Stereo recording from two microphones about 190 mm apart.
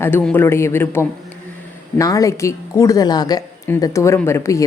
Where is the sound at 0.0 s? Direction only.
10° left (ahead or behind).